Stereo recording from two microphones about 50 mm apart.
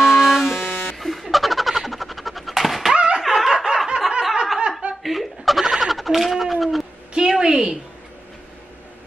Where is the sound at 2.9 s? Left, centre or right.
Centre.